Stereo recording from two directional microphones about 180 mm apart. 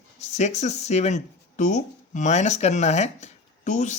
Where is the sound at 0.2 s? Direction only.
40° left (ahead or behind).